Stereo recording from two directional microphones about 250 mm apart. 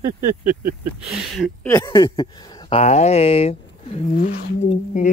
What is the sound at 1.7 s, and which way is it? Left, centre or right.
Speech, centre.